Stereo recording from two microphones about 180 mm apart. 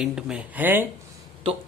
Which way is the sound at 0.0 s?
5° right (ahead or behind).